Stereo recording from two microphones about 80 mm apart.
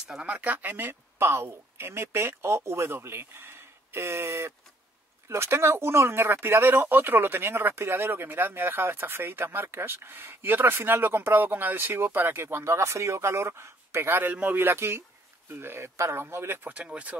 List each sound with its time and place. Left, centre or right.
0.1 s speech: centre; by 16.7 s right
16.7 s speech: centre